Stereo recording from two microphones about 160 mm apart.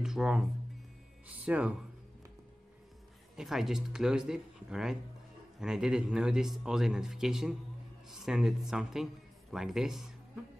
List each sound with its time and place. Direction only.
0.0 s music: 5° right (ahead or behind)
1.2 s speech: 10° right (ahead or behind)
3.3 s a man's voice: centre (ahead or behind)